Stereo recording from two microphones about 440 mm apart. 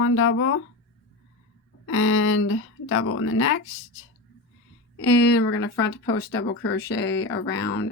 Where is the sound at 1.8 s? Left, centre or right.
Left.